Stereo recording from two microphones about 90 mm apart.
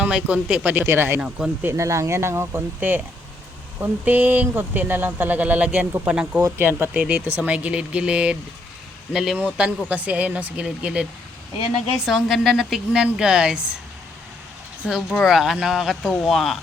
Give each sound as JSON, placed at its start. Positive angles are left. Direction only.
{"t": 0.0, "sound": "speech", "side_deg": -10}
{"t": 1.6, "sound": "a woman's voice", "side_deg": -35}
{"t": 9.4, "sound": "speech", "side_deg": -15}
{"t": 12.0, "sound": "a woman's voice", "side_deg": 0}
{"t": 15.1, "sound": "a woman's voice", "side_deg": 0}